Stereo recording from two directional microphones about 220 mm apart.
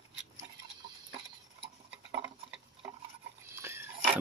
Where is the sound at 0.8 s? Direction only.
20° right (ahead or behind).